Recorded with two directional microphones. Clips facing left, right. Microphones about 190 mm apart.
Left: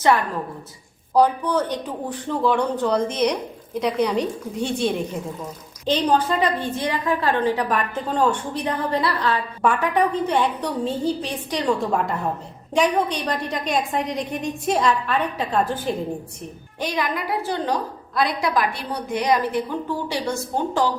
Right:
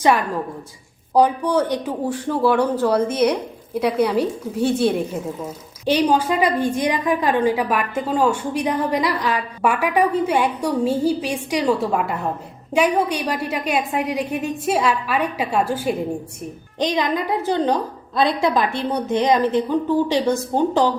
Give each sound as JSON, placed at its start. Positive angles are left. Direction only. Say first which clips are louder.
{"t": 1.1, "sound": "a woman's voice", "louder": "right 2 dB", "side_deg": -10}
{"t": 16.8, "sound": "a woman's voice", "louder": "right 5 dB", "side_deg": -20}